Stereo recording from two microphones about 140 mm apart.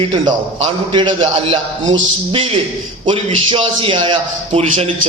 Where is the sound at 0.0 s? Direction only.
35° right (ahead or behind).